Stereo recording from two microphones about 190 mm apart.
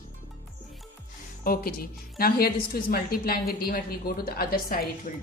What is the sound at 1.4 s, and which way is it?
A woman's voice, 50° left (ahead or behind).